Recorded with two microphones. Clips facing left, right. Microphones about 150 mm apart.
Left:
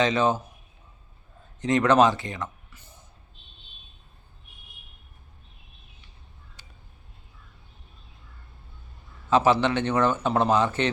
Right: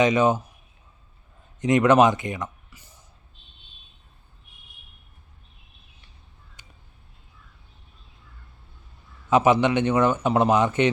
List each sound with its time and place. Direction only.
0.0 s a man's voice: 15° right (ahead or behind)
1.6 s speech: 15° right (ahead or behind)
9.3 s a man's voice: 15° right (ahead or behind)